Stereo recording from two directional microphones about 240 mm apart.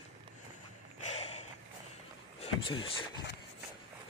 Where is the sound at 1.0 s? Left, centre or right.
Left.